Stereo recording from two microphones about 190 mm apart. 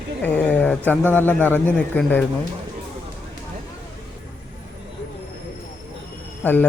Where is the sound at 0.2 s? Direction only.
5° left (ahead or behind).